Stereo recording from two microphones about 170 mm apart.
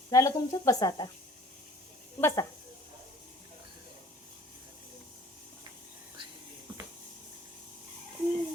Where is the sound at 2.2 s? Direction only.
15° left (ahead or behind).